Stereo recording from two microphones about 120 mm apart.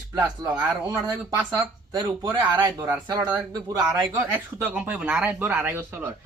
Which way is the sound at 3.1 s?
35° right (ahead or behind).